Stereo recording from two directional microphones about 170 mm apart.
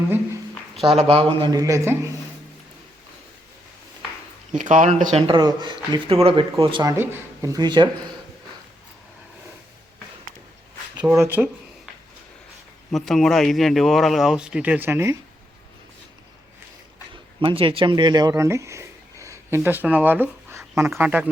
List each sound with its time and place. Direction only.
0.9 s speech: 35° right (ahead or behind); by 2.0 s 15° right (ahead or behind)
4.5 s speech: 45° right (ahead or behind)
5.1 s speech: 30° right (ahead or behind)
6.9 s speech: 15° right (ahead or behind)
10.9 s speech: 10° right (ahead or behind)
12.9 s a man's voice: centre (ahead or behind); by 15.2 s 15° right (ahead or behind)
17.4 s speech: 30° right (ahead or behind); by 21.2 s 10° right (ahead or behind)